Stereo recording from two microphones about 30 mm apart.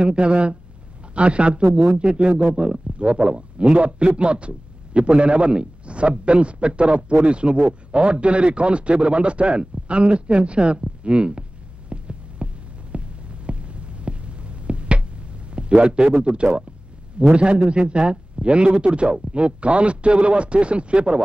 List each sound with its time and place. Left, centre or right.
0.0 s speech: right
11.9 s heart sounds: right
15.5 s speech: right
17.3 s speech: right